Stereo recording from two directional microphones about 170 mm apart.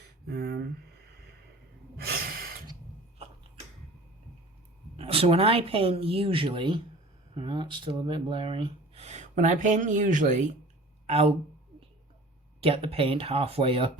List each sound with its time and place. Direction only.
0.3 s speech: 70° right (ahead or behind)
4.9 s speech: 35° right (ahead or behind)
12.5 s speech: 35° right (ahead or behind)